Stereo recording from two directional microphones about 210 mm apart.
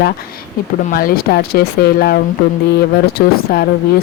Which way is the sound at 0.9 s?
45° left (ahead or behind).